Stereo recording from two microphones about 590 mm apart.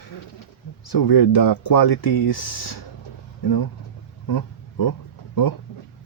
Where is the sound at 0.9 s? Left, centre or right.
Left.